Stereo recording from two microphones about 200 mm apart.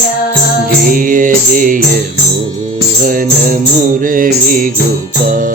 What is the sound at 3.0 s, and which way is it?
Music, 40° right (ahead or behind).